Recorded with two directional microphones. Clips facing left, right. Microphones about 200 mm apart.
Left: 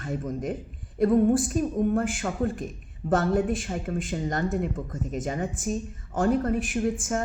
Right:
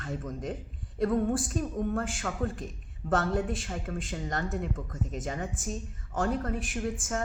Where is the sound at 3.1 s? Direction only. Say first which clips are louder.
Left 5 dB; 20° left (ahead or behind).